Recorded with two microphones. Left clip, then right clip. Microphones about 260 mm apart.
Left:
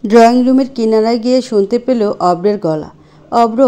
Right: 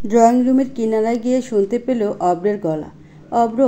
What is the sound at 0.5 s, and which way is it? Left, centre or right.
Speech, left.